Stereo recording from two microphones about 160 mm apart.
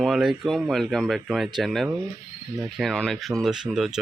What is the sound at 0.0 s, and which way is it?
Speech, centre (ahead or behind).